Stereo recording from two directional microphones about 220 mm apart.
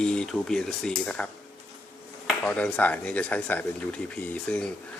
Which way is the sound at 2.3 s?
5° left (ahead or behind).